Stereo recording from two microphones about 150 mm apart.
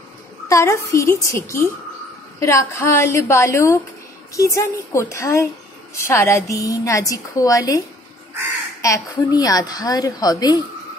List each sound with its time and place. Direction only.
0.5 s a woman's voice: 20° left (ahead or behind)
8.8 s a woman's voice: 20° left (ahead or behind)